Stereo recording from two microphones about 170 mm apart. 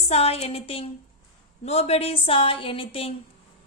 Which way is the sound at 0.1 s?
35° left (ahead or behind).